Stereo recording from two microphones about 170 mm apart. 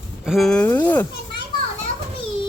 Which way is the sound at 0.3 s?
Centre (ahead or behind).